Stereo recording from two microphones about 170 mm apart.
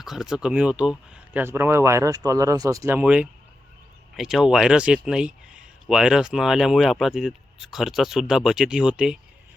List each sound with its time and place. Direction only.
0.0 s speech: centre (ahead or behind)